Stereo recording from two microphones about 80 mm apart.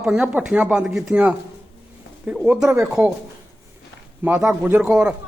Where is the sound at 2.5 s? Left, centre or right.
Centre.